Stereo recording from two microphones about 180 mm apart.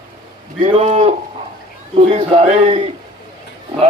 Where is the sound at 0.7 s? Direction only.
40° right (ahead or behind).